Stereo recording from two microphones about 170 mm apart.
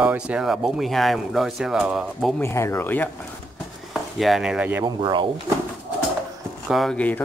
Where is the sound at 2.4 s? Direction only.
15° left (ahead or behind).